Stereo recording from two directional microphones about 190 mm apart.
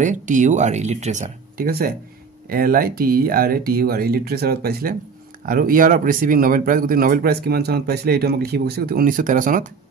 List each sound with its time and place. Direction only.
0.0 s speech: 40° right (ahead or behind)
2.5 s speech: 50° right (ahead or behind)